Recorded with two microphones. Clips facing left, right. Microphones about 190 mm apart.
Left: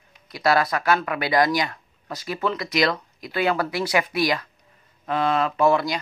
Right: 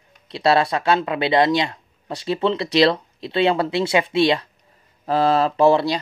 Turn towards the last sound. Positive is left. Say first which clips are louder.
# right 4 dB
turn(degrees=-30)  # may be behind; listen again after turning